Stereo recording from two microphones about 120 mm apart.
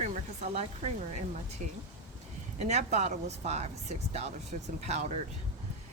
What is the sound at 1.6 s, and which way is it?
Speech, 90° right.